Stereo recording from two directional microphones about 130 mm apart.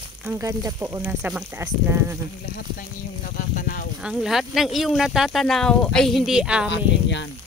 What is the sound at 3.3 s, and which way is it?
Speech, 90° left.